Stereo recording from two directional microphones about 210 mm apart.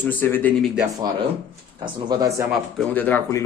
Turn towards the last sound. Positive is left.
turn(degrees=10)  # may be behind; listen again after turning